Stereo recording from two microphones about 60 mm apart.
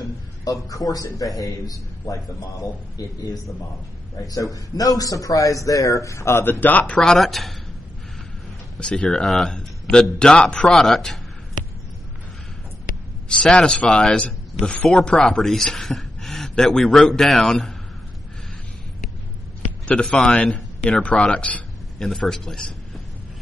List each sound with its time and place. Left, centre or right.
0.5 s a man's voice: left
4.2 s a man's voice: left
6.6 s speech: left
7.0 s speech: centre
8.7 s a man's voice: centre
13.3 s a man's voice: centre
15.2 s speech: centre
19.9 s a man's voice: centre
21.9 s a man's voice: centre